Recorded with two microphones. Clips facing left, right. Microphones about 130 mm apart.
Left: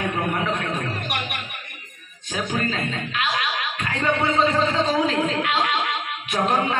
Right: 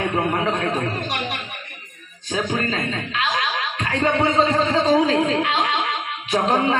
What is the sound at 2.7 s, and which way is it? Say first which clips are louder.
Speech: right 2 dB; 30° right (ahead or behind).